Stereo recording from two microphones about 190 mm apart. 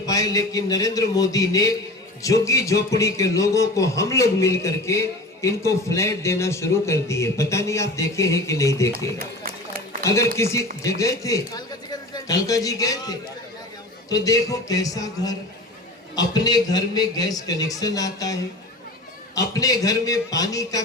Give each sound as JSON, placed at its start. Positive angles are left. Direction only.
{"t": 0.0, "sound": "a man's voice", "side_deg": 20}
{"t": 9.1, "sound": "run", "side_deg": -50}
{"t": 10.0, "sound": "a man's voice", "side_deg": 15}
{"t": 19.5, "sound": "a man's voice", "side_deg": 20}